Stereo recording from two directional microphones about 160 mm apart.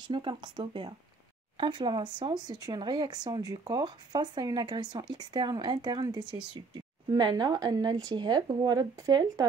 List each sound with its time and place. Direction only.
0.0 s speech: 30° right (ahead or behind)